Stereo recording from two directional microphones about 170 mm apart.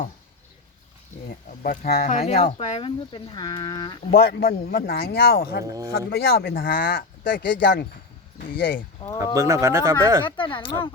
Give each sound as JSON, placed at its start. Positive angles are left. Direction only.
{"t": 1.5, "sound": "speech", "side_deg": 50}
{"t": 2.0, "sound": "speech", "side_deg": 40}
{"t": 4.1, "sound": "speech", "side_deg": 65}
{"t": 7.4, "sound": "speech", "side_deg": 90}
{"t": 8.4, "sound": "speech", "side_deg": 60}
{"t": 9.1, "sound": "speech", "side_deg": -15}
{"t": 10.2, "sound": "speech", "side_deg": 30}